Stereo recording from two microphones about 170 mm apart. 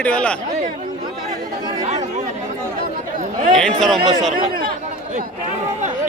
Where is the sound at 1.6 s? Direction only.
40° right (ahead or behind).